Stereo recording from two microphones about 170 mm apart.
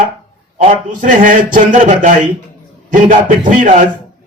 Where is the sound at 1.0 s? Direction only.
50° right (ahead or behind).